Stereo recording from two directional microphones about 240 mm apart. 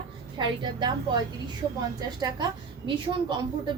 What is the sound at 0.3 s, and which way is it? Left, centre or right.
A woman's voice, centre.